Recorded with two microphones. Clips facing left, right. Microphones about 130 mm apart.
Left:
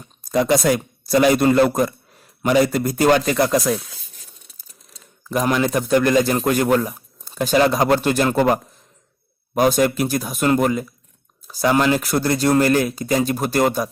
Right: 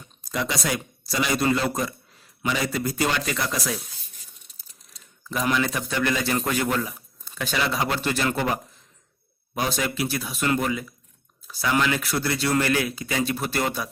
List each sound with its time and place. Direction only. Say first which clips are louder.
0.3 s a man's voice: left 10 dB; 50° left (ahead or behind)
5.3 s a man's voice: left 6 dB; 45° left (ahead or behind)
9.6 s a man's voice: left 10 dB; 45° left (ahead or behind)